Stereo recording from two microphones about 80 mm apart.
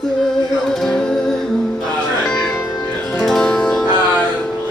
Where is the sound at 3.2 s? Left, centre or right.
Centre.